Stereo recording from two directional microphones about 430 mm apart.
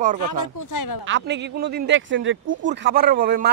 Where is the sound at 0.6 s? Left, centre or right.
Left.